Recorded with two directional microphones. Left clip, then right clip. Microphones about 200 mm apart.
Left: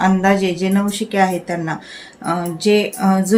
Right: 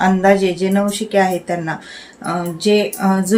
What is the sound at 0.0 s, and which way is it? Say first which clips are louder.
Speech: right 2 dB; centre (ahead or behind).